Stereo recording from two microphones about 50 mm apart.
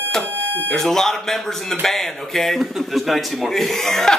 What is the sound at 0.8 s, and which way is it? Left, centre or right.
Speech, centre.